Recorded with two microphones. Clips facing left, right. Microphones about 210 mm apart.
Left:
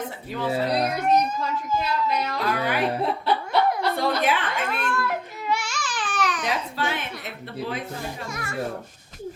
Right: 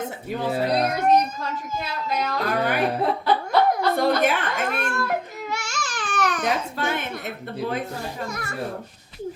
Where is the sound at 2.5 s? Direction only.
50° right (ahead or behind).